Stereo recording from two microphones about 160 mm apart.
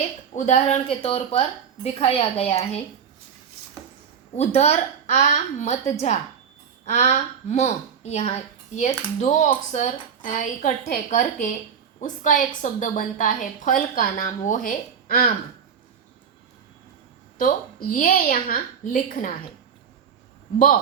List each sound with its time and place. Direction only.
0.3 s a woman's voice: 50° left (ahead or behind)
4.4 s a woman's voice: 40° left (ahead or behind); by 15.3 s 60° left (ahead or behind)
17.3 s a woman's voice: 60° left (ahead or behind)